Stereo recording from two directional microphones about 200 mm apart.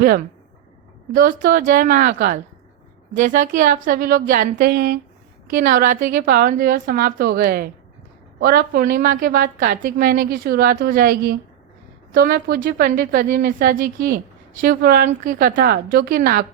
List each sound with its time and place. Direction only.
1.1 s a woman's voice: 45° right (ahead or behind)